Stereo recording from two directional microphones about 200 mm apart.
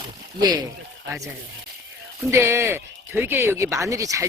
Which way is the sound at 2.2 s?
15° right (ahead or behind).